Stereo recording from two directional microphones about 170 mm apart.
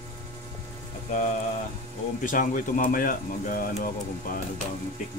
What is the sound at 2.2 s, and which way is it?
A man's voice, 50° left (ahead or behind).